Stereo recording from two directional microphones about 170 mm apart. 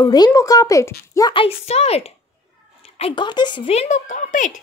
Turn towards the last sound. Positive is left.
turn(degrees=50)  # may be behind; listen again after turning